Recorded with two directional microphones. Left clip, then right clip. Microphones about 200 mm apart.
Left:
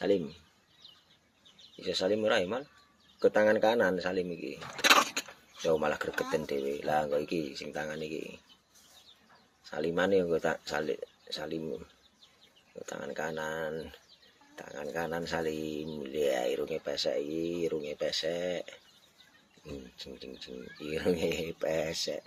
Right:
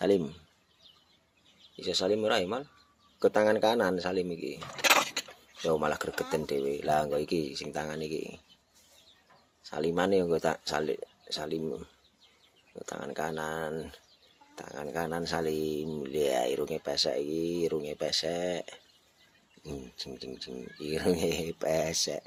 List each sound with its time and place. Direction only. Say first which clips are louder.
1.7 s speech: right 1 dB; 20° right (ahead or behind)
4.8 s dishes: left 1 dB; centre (ahead or behind)
5.6 s speech: even; 20° right (ahead or behind)
9.6 s speech: right 1 dB; 25° right (ahead or behind)
12.8 s speech: right 1 dB; 20° right (ahead or behind)
20.0 s speech: right 4 dB; 30° right (ahead or behind)